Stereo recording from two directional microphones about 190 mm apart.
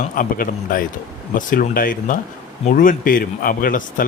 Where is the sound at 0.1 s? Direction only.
45° left (ahead or behind).